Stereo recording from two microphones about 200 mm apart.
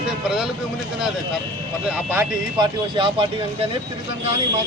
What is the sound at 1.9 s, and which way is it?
Speech, 10° right (ahead or behind).